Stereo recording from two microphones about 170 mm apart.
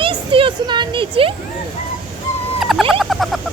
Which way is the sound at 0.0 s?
30° right (ahead or behind).